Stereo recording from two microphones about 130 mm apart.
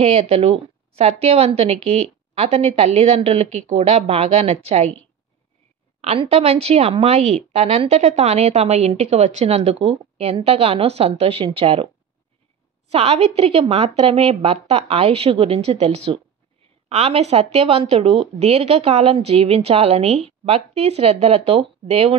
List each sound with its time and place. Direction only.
0.0 s a woman's voice: 50° right (ahead or behind)
5.9 s a woman's voice: 50° right (ahead or behind)
12.9 s a woman's voice: 50° right (ahead or behind)